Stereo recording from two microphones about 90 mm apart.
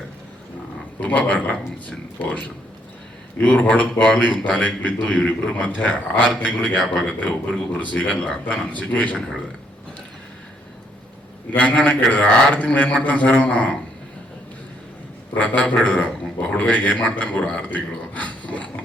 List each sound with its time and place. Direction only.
0.9 s a man's voice: 15° left (ahead or behind)
3.4 s a man's voice: 10° left (ahead or behind)
11.5 s a man's voice: 15° left (ahead or behind)
15.4 s a man's voice: 15° left (ahead or behind)